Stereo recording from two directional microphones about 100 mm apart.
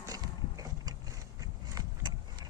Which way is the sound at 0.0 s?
40° right (ahead or behind).